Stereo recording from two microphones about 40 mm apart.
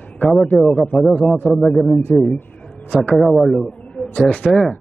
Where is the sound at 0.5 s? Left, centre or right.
Centre.